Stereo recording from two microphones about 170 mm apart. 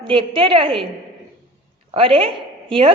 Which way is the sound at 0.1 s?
30° right (ahead or behind).